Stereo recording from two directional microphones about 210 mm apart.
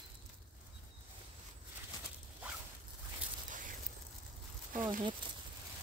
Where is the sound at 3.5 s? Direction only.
40° right (ahead or behind).